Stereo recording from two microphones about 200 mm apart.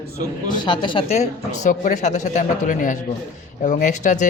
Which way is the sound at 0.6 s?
25° left (ahead or behind).